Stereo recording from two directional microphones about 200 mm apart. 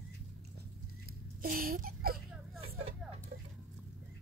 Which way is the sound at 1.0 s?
45° right (ahead or behind).